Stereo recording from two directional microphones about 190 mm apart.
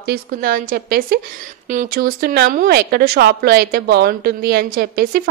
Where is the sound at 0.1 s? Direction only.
50° right (ahead or behind).